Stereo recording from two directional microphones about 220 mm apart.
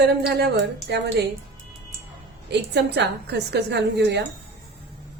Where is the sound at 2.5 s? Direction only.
50° right (ahead or behind).